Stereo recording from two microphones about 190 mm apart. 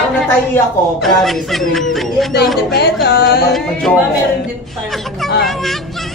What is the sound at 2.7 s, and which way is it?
Speech, 60° left (ahead or behind).